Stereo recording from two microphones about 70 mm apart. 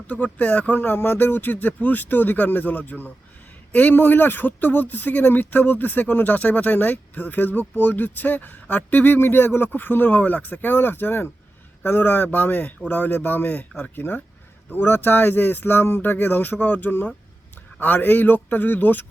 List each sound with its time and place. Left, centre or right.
0.1 s a man's voice: left